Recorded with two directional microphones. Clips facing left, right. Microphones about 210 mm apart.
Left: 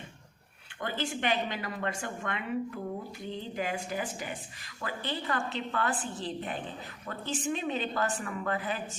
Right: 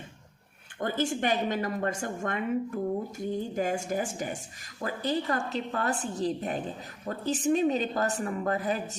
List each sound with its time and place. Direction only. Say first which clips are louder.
0.8 s a woman's voice: right 5 dB; 45° right (ahead or behind)